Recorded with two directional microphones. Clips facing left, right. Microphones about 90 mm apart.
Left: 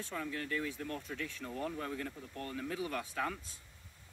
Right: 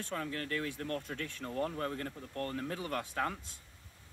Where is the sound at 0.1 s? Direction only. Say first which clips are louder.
Right 1 dB; 55° right (ahead or behind).